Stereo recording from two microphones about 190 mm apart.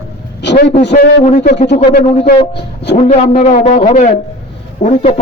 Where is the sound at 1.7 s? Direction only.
45° left (ahead or behind).